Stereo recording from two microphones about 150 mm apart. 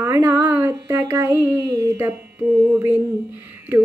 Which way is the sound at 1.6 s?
25° right (ahead or behind).